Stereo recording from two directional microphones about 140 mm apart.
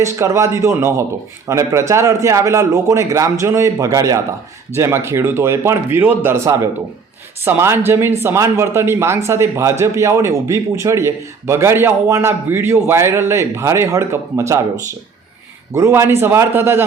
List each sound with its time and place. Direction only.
0.0 s a man's voice: 20° right (ahead or behind)
15.7 s a man's voice: 20° right (ahead or behind)